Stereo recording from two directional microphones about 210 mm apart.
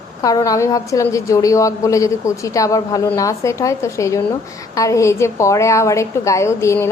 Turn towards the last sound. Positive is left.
turn(degrees=15)  # may be behind; listen again after turning